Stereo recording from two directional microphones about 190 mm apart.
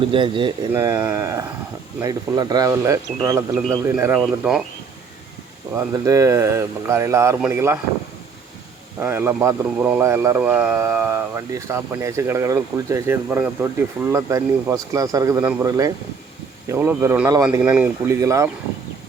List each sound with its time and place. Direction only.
0.1 s speech: 25° right (ahead or behind)
0.7 s speech: 15° right (ahead or behind)
3.5 s speech: 5° left (ahead or behind)
3.8 s speech: 10° right (ahead or behind)
5.7 s speech: 15° right (ahead or behind)
9.0 s speech: 10° right (ahead or behind)